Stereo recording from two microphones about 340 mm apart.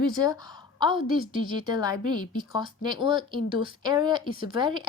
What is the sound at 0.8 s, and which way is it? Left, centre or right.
Speech, centre.